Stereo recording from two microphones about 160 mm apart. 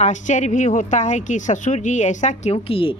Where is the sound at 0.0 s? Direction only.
50° left (ahead or behind).